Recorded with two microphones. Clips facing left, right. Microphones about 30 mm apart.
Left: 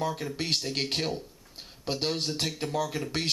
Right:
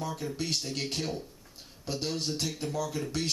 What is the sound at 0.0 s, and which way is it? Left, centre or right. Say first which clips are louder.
Speech: left 3 dB; left.